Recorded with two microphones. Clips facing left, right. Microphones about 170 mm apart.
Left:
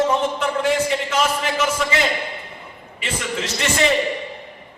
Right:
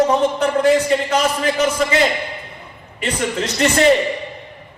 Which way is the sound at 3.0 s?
40° right (ahead or behind).